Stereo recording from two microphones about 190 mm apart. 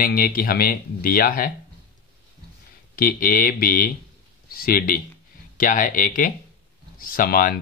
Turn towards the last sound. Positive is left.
turn(degrees=45)  # may be behind; listen again after turning